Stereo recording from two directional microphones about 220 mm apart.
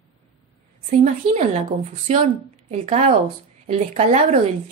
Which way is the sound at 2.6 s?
30° right (ahead or behind).